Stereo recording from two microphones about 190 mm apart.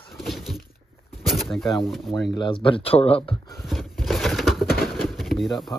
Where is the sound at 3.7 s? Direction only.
Centre (ahead or behind).